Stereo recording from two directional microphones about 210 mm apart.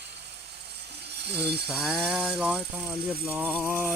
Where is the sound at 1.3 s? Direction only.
50° right (ahead or behind).